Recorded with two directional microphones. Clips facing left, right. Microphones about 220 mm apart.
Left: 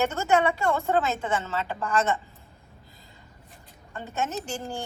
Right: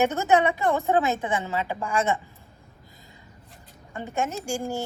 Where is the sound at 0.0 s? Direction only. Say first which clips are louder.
Right 2 dB; 15° right (ahead or behind).